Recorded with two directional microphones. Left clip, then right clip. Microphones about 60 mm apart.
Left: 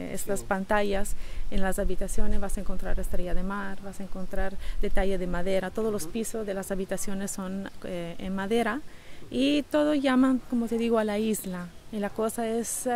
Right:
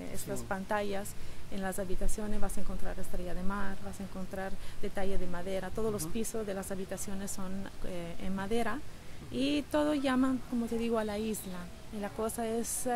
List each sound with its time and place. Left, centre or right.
0.0 s speech: left
2.0 s speech: left